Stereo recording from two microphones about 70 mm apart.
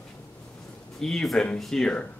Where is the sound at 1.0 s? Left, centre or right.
Centre.